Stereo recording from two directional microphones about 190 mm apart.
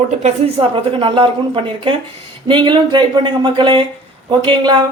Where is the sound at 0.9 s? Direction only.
25° right (ahead or behind).